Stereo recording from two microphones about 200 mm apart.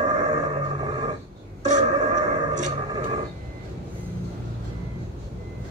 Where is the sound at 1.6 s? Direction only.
35° right (ahead or behind).